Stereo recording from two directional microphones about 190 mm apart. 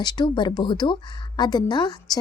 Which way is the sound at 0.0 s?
20° left (ahead or behind).